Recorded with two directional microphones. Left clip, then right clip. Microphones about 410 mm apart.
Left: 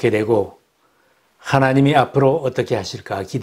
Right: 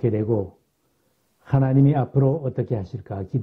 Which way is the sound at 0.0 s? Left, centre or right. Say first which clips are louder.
Left 7 dB; centre.